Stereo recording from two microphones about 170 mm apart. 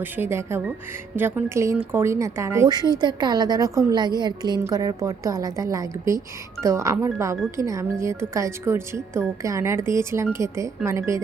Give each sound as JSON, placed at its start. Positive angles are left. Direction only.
{"t": 0.0, "sound": "a woman's voice", "side_deg": -15}